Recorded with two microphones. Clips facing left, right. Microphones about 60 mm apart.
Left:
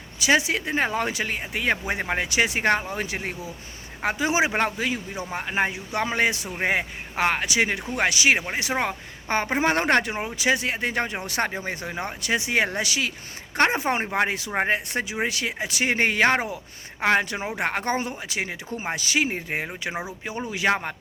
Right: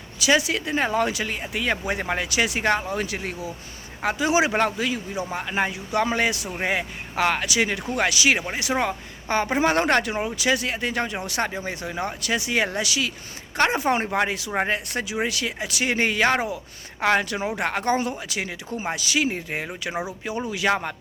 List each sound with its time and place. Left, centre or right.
0.2 s speech: left